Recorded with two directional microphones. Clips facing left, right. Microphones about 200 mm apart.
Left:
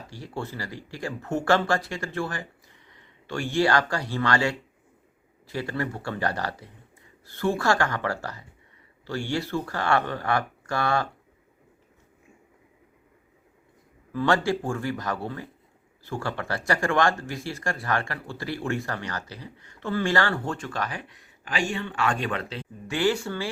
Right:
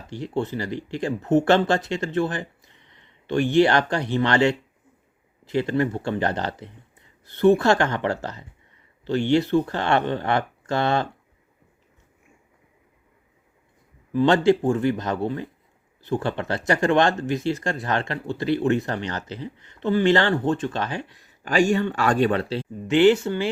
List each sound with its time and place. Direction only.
0.1 s speech: 20° right (ahead or behind)
14.1 s speech: 20° right (ahead or behind)
21.4 s speech: 45° right (ahead or behind); by 23.5 s 20° right (ahead or behind)